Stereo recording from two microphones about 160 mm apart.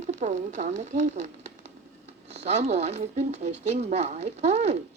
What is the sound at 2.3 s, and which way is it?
Speech, 45° right (ahead or behind).